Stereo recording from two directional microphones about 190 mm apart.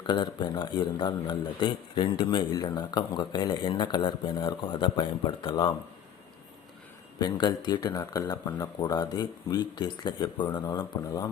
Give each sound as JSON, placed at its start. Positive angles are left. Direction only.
{"t": 0.1, "sound": "a man's voice", "side_deg": 25}
{"t": 7.2, "sound": "a man's voice", "side_deg": 25}